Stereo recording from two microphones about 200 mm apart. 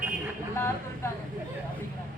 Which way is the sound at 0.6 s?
10° left (ahead or behind).